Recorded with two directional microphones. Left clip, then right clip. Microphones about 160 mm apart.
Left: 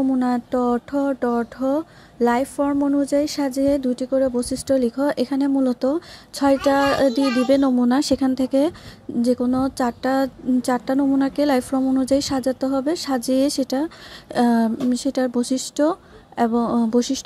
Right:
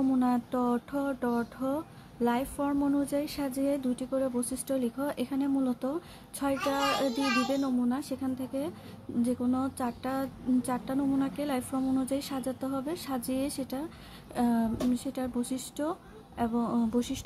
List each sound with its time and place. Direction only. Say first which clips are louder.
0.2 s a woman's voice: left 8 dB; 35° left (ahead or behind); by 8.7 s 55° left (ahead or behind)
9.2 s speech: left 10 dB; 45° left (ahead or behind)